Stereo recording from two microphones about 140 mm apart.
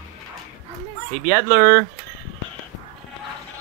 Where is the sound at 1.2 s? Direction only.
25° left (ahead or behind).